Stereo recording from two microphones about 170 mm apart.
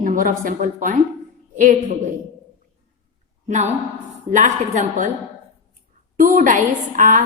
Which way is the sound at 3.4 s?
45° right (ahead or behind).